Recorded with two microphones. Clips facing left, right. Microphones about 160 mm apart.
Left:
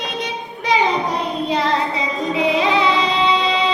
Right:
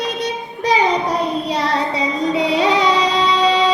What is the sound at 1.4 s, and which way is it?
Music, 35° right (ahead or behind).